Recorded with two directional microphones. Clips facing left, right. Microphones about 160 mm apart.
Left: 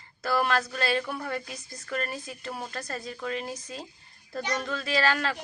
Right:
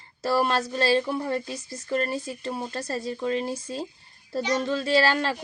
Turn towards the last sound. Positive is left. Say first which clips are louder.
# right 4 dB
turn(degrees=-30)  # may be behind; listen again after turning